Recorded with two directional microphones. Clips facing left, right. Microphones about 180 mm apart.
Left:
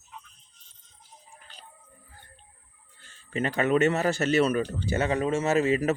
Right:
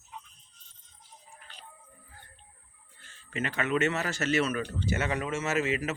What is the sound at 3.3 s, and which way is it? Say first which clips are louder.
Speech: left 5 dB; 35° left (ahead or behind).